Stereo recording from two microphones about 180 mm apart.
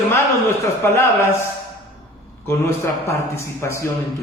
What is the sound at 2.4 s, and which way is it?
A man's voice, 15° left (ahead or behind).